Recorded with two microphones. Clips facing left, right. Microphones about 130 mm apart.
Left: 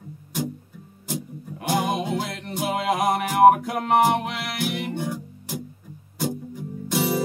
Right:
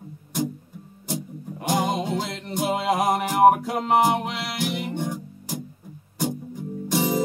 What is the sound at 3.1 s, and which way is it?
Music, centre (ahead or behind).